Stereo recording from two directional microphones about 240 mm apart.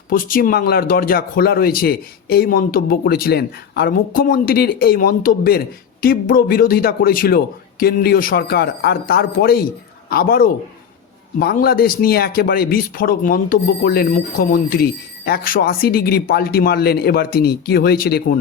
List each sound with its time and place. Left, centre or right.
0.1 s a man's voice: left